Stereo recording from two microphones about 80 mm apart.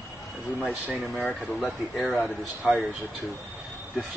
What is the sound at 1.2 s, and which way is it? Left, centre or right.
Speech, centre.